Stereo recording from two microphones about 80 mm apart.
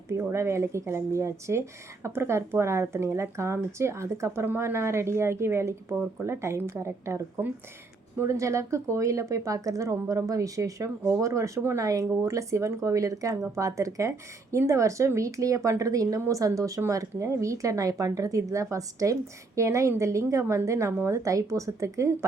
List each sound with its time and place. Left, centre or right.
0.1 s a woman's voice: right